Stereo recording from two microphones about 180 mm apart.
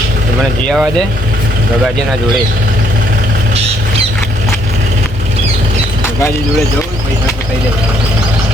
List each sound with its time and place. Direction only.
0.6 s speech: 5° left (ahead or behind)